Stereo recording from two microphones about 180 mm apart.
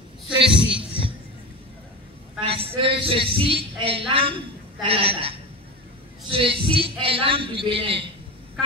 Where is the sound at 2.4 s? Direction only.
30° right (ahead or behind).